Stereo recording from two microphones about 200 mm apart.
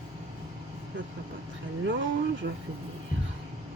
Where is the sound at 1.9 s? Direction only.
70° right (ahead or behind).